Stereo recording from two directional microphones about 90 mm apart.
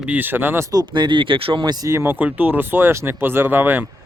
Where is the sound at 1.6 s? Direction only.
50° right (ahead or behind).